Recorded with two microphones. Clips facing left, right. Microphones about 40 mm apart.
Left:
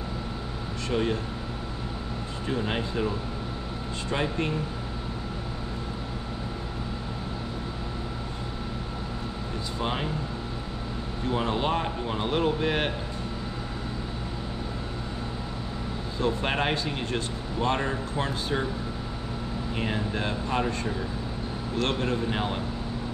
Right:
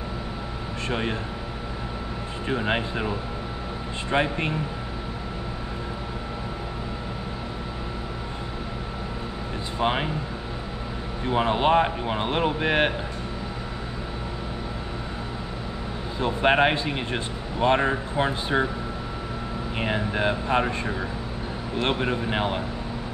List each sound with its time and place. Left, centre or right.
0.8 s speech: right
2.4 s speech: right
9.8 s speech: right
11.2 s speech: right
16.2 s speech: right
19.8 s speech: right